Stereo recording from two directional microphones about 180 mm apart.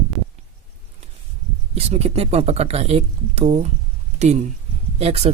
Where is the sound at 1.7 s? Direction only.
35° right (ahead or behind).